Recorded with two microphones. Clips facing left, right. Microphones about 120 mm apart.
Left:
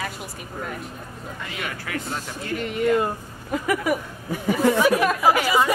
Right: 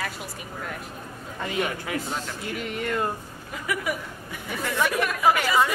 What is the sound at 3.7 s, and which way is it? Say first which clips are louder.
Speech: left 5 dB; 45° left (ahead or behind).